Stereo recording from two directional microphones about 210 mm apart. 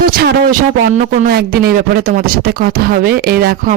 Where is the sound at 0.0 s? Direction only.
45° right (ahead or behind).